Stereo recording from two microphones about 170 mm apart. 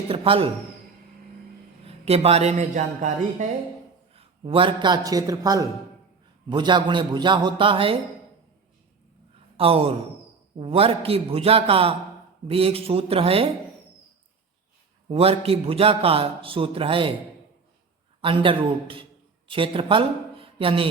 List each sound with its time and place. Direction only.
0.1 s a man's voice: 30° right (ahead or behind)
1.8 s a man's voice: 35° right (ahead or behind)
4.1 s a man's voice: 35° right (ahead or behind)
9.6 s a man's voice: 35° right (ahead or behind)
15.1 s a man's voice: 35° right (ahead or behind)
18.2 s a man's voice: 30° right (ahead or behind)